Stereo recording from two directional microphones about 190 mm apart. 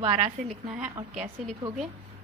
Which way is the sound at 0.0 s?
40° right (ahead or behind).